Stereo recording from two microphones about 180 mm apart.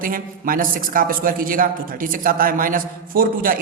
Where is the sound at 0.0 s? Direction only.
50° right (ahead or behind).